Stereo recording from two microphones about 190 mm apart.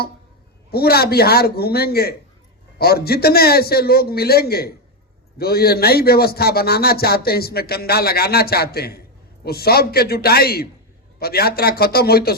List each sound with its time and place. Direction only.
0.7 s a man's voice: 55° left (ahead or behind)